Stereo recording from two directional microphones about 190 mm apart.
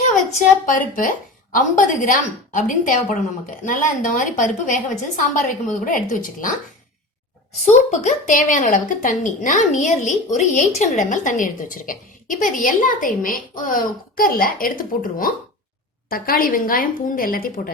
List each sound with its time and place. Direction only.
0.6 s a woman's voice: 45° left (ahead or behind)
7.6 s a woman's voice: 40° left (ahead or behind)